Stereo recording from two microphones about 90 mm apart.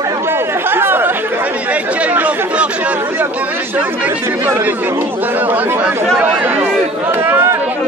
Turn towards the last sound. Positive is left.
turn(degrees=-25)  # may be behind; listen again after turning